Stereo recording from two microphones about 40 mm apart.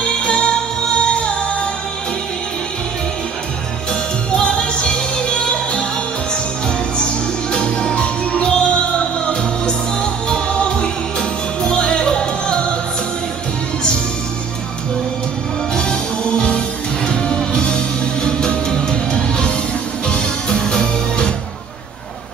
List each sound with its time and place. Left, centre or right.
0.0 s music: left
4.4 s music: left
7.0 s music: left
15.7 s music: left